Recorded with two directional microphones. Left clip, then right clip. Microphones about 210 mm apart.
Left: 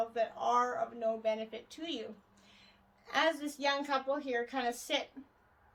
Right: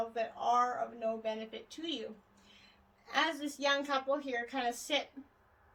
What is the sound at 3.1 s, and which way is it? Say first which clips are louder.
A woman's voice: left 2 dB; 35° left (ahead or behind).